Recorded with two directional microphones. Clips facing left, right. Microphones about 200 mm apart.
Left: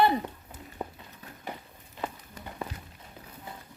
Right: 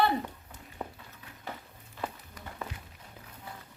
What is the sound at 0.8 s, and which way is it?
Run, 10° left (ahead or behind).